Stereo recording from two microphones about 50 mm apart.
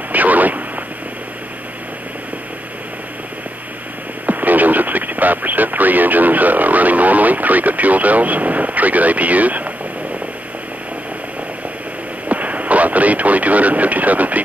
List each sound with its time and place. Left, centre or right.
0.1 s a sound: right
4.3 s speech: right
12.3 s speech: right